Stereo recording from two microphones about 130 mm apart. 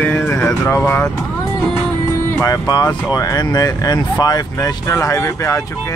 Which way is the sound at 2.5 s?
30° left (ahead or behind).